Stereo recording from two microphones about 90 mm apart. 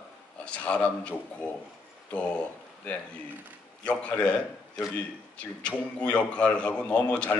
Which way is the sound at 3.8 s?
15° left (ahead or behind).